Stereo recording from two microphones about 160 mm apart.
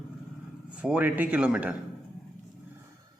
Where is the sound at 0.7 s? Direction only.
5° right (ahead or behind).